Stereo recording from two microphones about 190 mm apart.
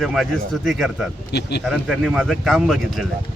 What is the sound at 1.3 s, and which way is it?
Speech, 60° left (ahead or behind).